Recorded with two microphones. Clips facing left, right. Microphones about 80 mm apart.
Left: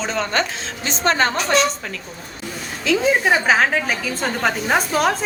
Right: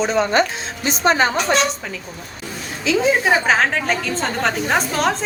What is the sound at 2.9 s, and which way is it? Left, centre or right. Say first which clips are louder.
A woman's voice: right 1 dB; centre.